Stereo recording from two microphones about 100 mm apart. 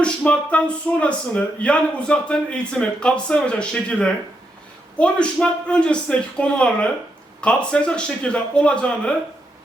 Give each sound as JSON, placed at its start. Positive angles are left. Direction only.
{"t": 0.0, "sound": "speech", "side_deg": 10}